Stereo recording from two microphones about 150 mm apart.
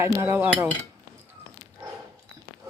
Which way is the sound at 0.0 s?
15° right (ahead or behind).